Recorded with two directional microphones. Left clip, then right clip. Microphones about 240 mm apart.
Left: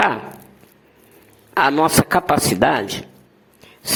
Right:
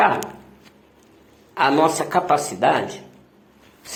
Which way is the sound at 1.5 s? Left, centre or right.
Left.